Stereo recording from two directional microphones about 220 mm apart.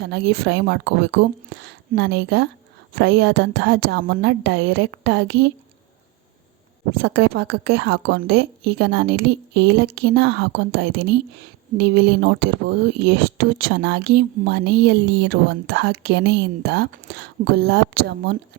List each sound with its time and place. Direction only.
0.0 s speech: 50° right (ahead or behind)
7.0 s speech: 50° right (ahead or behind)